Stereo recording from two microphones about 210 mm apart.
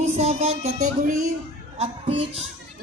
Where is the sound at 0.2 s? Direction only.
30° right (ahead or behind).